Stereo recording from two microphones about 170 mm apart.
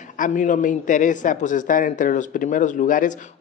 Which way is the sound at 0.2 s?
50° left (ahead or behind).